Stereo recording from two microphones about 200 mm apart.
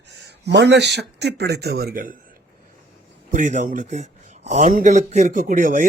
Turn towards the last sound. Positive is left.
turn(degrees=-45)  # may be behind; listen again after turning